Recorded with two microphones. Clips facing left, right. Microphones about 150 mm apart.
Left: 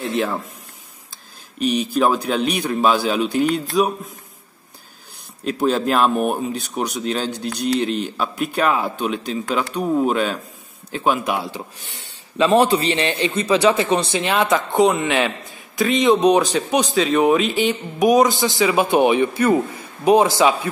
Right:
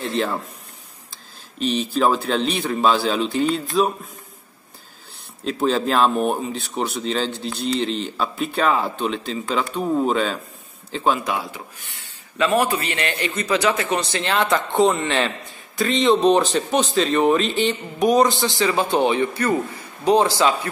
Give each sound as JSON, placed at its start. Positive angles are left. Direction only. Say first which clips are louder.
{"t": 0.0, "sound": "a man's voice", "louder": "left 1 dB", "side_deg": 5}
{"t": 1.6, "sound": "speech", "louder": "left 2 dB", "side_deg": 5}
{"t": 5.4, "sound": "speech", "louder": "left 1 dB", "side_deg": 5}
{"t": 12.4, "sound": "a man's voice", "louder": "left 4 dB", "side_deg": 30}
{"t": 13.3, "sound": "speech", "louder": "left 4 dB", "side_deg": 10}
{"t": 14.5, "sound": "speech", "louder": "left 1 dB", "side_deg": 0}
{"t": 17.9, "sound": "a man's voice", "louder": "left 2 dB", "side_deg": 20}